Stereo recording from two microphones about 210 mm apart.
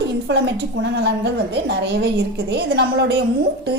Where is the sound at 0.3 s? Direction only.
55° right (ahead or behind).